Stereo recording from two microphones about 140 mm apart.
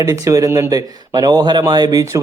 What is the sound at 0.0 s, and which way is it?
A man's voice, 25° right (ahead or behind).